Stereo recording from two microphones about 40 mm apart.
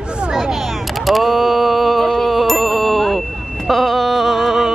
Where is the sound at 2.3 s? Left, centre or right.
Centre.